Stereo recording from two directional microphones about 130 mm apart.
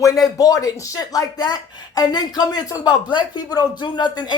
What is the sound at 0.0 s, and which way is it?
Speech, 25° left (ahead or behind).